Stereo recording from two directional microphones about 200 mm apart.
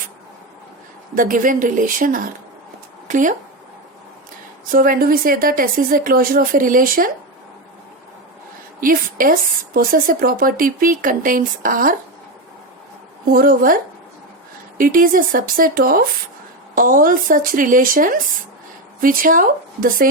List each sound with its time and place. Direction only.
1.1 s speech: 45° right (ahead or behind)
4.7 s speech: 45° right (ahead or behind)
8.8 s speech: 45° right (ahead or behind)
13.3 s speech: 45° right (ahead or behind)
14.8 s speech: 45° right (ahead or behind)